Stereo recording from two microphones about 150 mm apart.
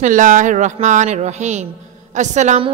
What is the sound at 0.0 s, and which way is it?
A woman's voice, 60° right (ahead or behind).